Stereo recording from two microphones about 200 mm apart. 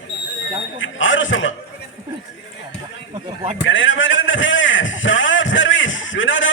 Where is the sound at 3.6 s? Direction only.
70° left (ahead or behind).